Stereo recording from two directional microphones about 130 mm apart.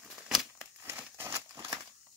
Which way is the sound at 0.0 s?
Centre (ahead or behind).